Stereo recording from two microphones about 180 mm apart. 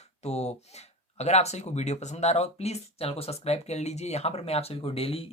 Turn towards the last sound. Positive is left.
turn(degrees=30)  # may be behind; listen again after turning